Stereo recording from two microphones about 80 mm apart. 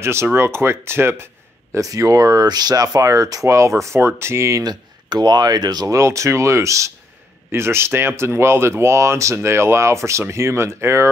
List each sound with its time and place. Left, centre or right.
0.0 s speech: right
4.6 s speech: right
5.9 s speech: right